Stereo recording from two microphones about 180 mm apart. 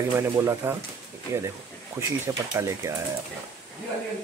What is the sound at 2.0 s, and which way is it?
Speech, 15° right (ahead or behind).